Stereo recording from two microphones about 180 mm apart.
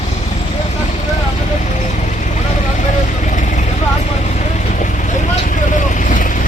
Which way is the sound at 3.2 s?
45° left (ahead or behind).